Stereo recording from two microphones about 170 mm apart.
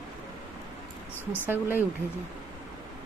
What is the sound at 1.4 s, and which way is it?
Speech, 10° right (ahead or behind).